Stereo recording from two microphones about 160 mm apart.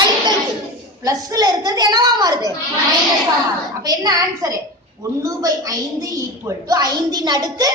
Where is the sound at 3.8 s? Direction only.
25° right (ahead or behind).